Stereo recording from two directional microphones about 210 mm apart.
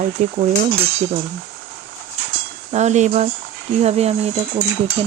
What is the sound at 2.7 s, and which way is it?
Speech, 35° right (ahead or behind).